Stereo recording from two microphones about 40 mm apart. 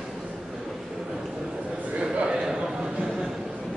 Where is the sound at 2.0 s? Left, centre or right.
Right.